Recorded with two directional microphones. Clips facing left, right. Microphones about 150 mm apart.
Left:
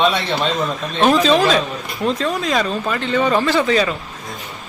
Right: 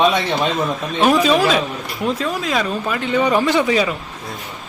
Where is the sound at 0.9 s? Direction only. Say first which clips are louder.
Left 1 dB; 10° right (ahead or behind).